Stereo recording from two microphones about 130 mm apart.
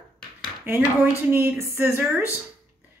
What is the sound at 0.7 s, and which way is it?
A woman's voice, 20° right (ahead or behind).